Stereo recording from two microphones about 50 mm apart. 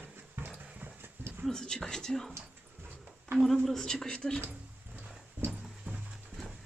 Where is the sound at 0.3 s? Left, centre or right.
Right.